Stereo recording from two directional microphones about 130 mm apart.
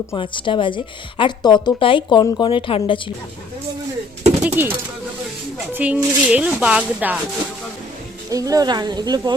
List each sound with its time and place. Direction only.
0.2 s speech: 40° left (ahead or behind)
4.4 s speech: 15° right (ahead or behind)
5.7 s speech: 10° right (ahead or behind)
8.3 s speech: 25° right (ahead or behind)